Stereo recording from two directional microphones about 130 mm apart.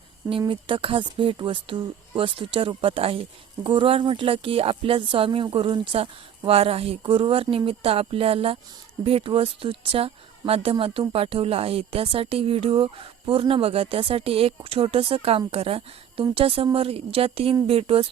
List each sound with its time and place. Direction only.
0.3 s speech: 40° right (ahead or behind)